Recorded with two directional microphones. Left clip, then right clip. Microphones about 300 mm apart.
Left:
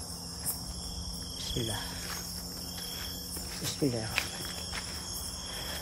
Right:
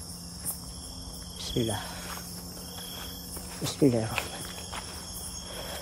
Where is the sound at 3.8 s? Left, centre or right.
Centre.